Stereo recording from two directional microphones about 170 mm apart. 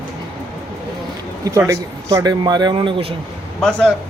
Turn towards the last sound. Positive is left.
turn(degrees=5)  # may be behind; listen again after turning